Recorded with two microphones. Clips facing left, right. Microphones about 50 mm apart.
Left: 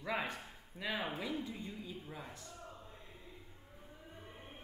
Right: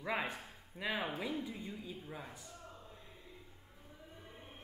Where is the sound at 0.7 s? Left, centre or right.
Centre.